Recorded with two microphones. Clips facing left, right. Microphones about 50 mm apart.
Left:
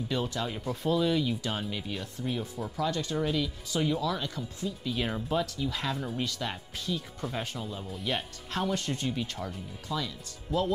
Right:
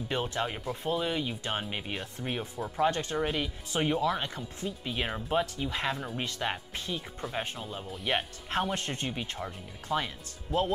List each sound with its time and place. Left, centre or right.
0.1 s speech: right
7.3 s speech: centre
8.1 s speech: right
9.8 s speech: right